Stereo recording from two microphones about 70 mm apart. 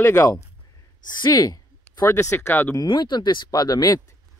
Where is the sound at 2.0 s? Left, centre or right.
Left.